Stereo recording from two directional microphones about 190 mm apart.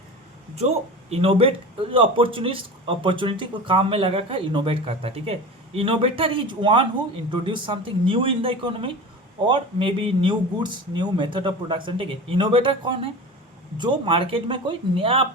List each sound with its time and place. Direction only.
1.1 s speech: 30° right (ahead or behind)